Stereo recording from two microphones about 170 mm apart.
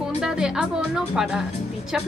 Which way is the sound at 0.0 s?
5° right (ahead or behind).